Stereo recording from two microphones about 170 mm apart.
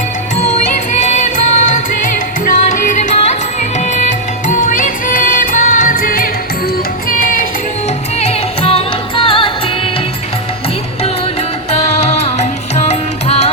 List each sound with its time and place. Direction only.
0.3 s music: 45° left (ahead or behind)
8.2 s music: 35° left (ahead or behind)
11.7 s music: 40° left (ahead or behind)